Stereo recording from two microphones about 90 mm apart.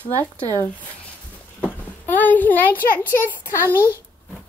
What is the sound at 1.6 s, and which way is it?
A child's voice, 20° left (ahead or behind).